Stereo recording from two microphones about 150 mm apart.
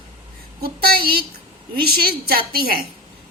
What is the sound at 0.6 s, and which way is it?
A woman's voice, 90° right.